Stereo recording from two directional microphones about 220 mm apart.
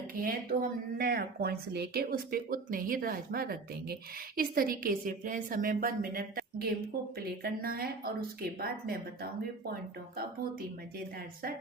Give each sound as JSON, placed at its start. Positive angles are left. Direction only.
{"t": 0.1, "sound": "a woman's voice", "side_deg": -40}